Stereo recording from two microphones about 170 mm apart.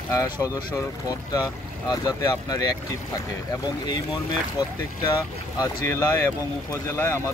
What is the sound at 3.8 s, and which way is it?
Speech, 25° left (ahead or behind).